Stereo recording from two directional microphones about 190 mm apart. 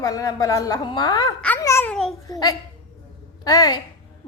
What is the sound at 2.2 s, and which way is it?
A woman's voice, 20° left (ahead or behind).